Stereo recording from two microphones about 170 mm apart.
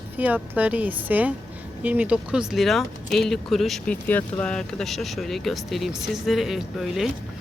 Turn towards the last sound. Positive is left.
turn(degrees=0)  # may be behind; listen again after turning